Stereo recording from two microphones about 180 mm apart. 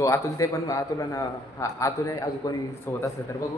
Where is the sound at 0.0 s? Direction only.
15° left (ahead or behind).